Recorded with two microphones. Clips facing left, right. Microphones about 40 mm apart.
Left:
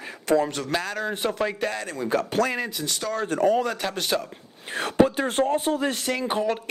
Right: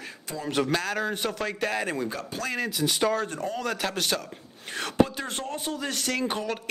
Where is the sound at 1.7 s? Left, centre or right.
Centre.